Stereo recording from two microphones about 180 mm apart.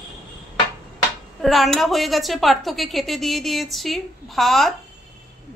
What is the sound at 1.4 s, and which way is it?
A woman's voice, centre (ahead or behind).